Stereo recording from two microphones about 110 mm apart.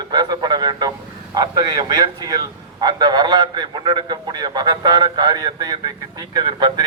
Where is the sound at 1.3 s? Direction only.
40° right (ahead or behind).